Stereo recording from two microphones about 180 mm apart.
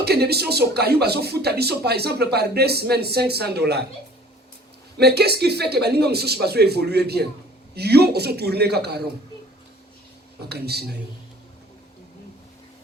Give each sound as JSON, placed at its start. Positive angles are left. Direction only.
{"t": 0.0, "sound": "speech", "side_deg": -60}
{"t": 4.9, "sound": "speech", "side_deg": -65}
{"t": 10.5, "sound": "speech", "side_deg": -65}